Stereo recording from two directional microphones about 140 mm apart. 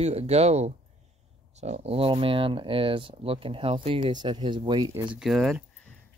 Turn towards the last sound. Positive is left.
turn(degrees=0)  # may be behind; listen again after turning